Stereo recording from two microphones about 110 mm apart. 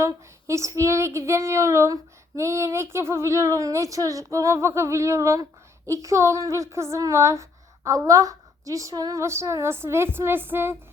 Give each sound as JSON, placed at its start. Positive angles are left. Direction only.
{"t": 0.0, "sound": "female singing", "side_deg": -25}